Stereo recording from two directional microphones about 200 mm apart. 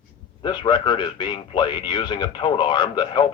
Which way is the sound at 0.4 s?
25° left (ahead or behind).